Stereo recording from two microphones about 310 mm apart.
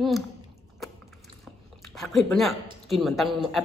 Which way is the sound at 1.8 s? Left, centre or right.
Centre.